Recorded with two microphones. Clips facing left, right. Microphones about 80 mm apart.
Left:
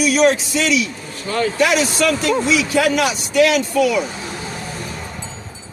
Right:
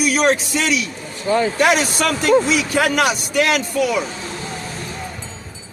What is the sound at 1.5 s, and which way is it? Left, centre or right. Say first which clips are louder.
Speech: even; right.